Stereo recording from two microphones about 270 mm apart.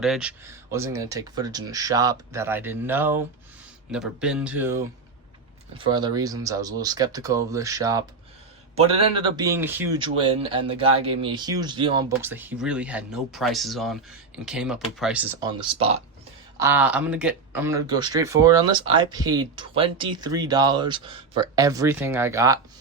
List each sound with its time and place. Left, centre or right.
0.0 s speech: centre
16.6 s speech: centre